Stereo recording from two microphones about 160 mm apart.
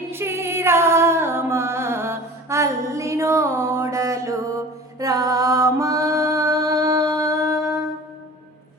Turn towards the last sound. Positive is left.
turn(degrees=-20)  # may be behind; listen again after turning